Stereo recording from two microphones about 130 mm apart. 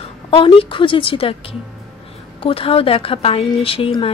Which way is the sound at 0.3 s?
45° left (ahead or behind).